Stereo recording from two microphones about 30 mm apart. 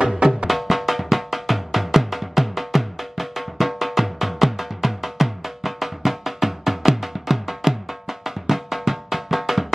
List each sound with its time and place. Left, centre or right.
0.0 s music: right
0.5 s drum: centre